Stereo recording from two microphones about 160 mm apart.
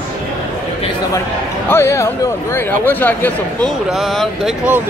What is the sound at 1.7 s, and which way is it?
A man's voice, 15° left (ahead or behind).